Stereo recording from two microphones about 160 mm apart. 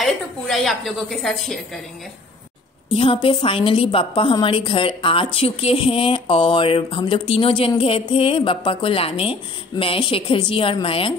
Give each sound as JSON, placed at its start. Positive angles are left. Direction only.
{"t": 0.0, "sound": "a woman's voice", "side_deg": 0}
{"t": 2.9, "sound": "a woman's voice", "side_deg": 35}